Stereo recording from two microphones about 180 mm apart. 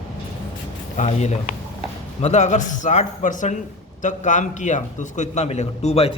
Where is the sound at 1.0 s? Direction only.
40° left (ahead or behind).